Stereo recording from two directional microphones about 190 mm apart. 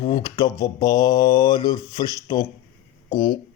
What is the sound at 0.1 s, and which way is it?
Speech, 20° left (ahead or behind).